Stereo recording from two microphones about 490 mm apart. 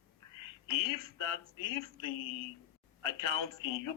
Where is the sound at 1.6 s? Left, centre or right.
Left.